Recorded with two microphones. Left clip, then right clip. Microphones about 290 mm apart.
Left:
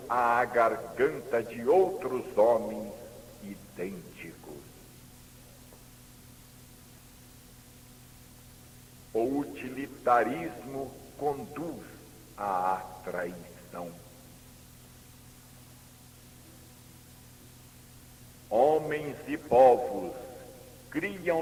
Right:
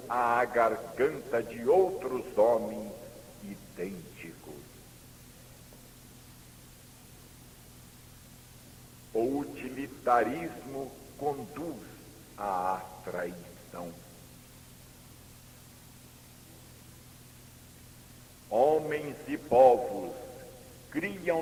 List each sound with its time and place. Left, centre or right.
0.1 s a man's voice: left
9.1 s a man's voice: left
18.5 s a man's voice: left